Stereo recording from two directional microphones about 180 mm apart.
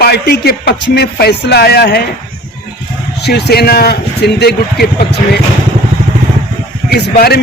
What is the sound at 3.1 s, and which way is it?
Speech, 65° left (ahead or behind).